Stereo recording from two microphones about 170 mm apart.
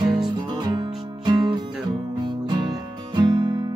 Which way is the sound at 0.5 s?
25° right (ahead or behind).